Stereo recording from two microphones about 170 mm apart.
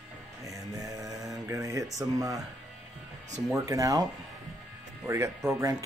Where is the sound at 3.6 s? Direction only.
20° right (ahead or behind).